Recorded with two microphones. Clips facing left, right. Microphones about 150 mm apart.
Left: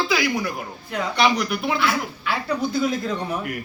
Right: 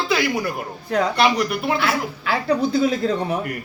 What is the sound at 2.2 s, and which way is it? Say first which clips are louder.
Speech: right 7 dB; 35° right (ahead or behind).